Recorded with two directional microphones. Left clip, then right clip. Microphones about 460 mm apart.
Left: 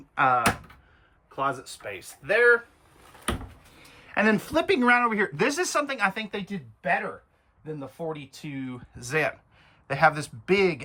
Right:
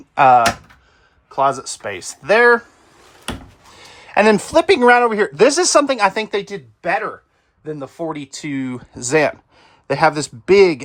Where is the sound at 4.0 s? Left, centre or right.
Centre.